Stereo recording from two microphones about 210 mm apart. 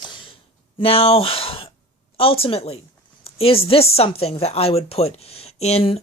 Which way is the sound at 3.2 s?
25° left (ahead or behind).